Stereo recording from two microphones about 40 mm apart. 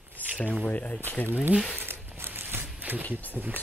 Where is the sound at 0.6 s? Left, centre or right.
Left.